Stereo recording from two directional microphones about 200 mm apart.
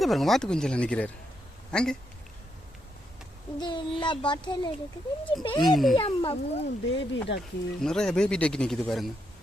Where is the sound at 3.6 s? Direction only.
25° left (ahead or behind).